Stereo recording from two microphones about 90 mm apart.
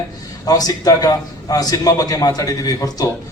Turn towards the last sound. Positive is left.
turn(degrees=40)  # may be behind; listen again after turning